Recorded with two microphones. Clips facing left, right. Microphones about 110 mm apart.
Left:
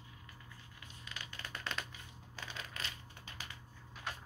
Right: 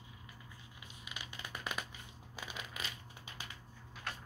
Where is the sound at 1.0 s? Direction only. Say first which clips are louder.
Even; 15° right (ahead or behind).